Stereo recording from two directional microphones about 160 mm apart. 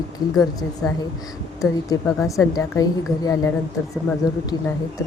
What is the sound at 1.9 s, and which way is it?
Speech, 20° left (ahead or behind).